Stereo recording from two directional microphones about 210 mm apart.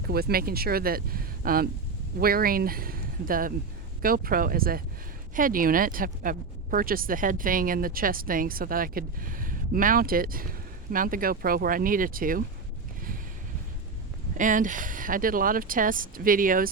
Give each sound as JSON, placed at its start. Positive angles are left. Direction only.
{"t": 0.1, "sound": "speech", "side_deg": -45}
{"t": 14.3, "sound": "speech", "side_deg": -40}